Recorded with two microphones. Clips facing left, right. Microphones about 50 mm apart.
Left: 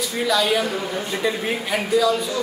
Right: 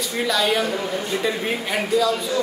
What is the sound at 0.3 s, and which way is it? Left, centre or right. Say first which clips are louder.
Speech: left 1 dB; centre.